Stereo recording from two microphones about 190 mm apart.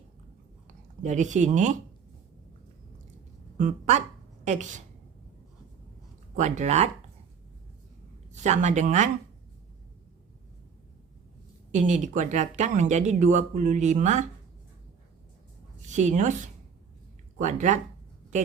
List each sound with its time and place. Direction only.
1.0 s speech: 40° right (ahead or behind)
3.6 s speech: 40° right (ahead or behind)
6.3 s speech: 40° right (ahead or behind)
8.3 s speech: 40° right (ahead or behind)
11.7 s speech: 40° right (ahead or behind)
15.8 s a woman's voice: 40° right (ahead or behind)